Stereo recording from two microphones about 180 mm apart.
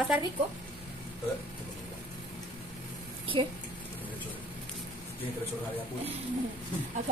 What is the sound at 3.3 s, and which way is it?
Speech, 30° right (ahead or behind).